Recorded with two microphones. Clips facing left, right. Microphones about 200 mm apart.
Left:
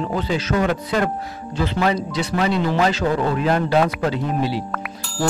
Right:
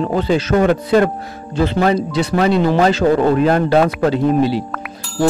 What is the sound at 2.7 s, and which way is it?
Music, 35° right (ahead or behind).